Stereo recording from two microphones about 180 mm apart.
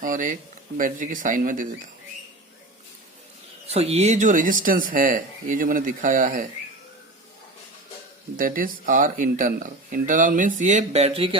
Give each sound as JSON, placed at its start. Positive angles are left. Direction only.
{"t": 0.0, "sound": "speech", "side_deg": -45}
{"t": 3.7, "sound": "speech", "side_deg": -35}
{"t": 8.4, "sound": "speech", "side_deg": -50}